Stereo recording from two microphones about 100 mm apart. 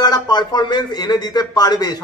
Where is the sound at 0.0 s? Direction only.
45° left (ahead or behind).